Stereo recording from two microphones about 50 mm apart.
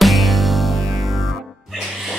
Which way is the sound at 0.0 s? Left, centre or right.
Centre.